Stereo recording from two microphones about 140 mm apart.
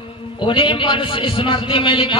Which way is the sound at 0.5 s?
40° left (ahead or behind).